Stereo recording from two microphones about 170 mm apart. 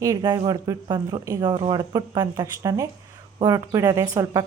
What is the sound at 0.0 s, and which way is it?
Speech, 20° right (ahead or behind).